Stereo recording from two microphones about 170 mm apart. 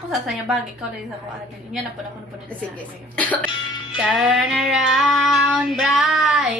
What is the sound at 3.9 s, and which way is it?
Music, 5° right (ahead or behind).